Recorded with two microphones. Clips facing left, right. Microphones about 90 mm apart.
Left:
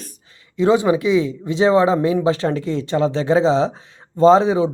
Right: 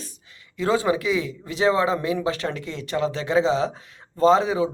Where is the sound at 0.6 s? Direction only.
20° left (ahead or behind).